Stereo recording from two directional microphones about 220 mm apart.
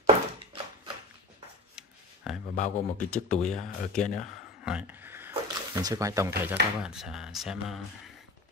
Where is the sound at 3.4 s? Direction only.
Centre (ahead or behind).